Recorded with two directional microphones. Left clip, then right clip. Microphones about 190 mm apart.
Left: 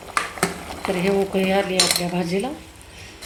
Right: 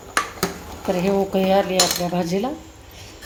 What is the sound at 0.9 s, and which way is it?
A woman's voice, 5° right (ahead or behind).